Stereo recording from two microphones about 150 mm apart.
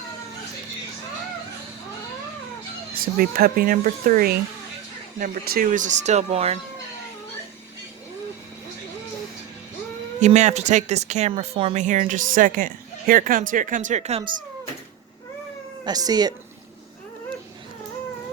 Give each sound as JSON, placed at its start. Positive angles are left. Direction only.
{"t": 2.9, "sound": "a woman's voice", "side_deg": -80}
{"t": 10.2, "sound": "speech", "side_deg": -50}
{"t": 11.8, "sound": "a woman's voice", "side_deg": -55}
{"t": 15.8, "sound": "speech", "side_deg": -25}